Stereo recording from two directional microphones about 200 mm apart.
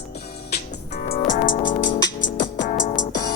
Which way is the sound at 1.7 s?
65° left (ahead or behind).